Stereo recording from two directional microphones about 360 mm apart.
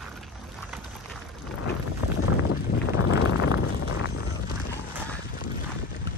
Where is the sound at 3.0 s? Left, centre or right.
Left.